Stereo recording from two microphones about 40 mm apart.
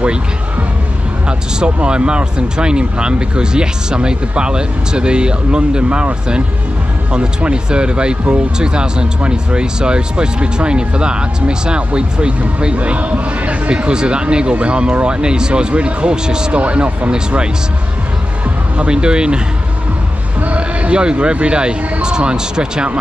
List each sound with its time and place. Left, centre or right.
1.6 s speech: right
7.1 s speech: right
16.6 s speech: right
18.8 s speech: right
20.4 s speech: right